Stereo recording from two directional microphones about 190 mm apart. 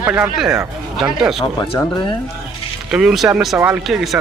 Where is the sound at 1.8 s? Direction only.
25° left (ahead or behind).